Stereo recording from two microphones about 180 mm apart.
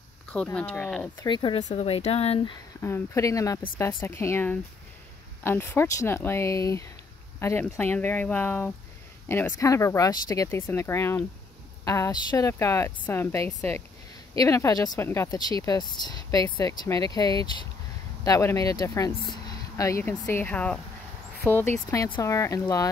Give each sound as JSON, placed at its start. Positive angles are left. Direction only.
{"t": 0.3, "sound": "speech", "side_deg": 5}
{"t": 1.2, "sound": "speech", "side_deg": 25}
{"t": 2.8, "sound": "speech", "side_deg": 15}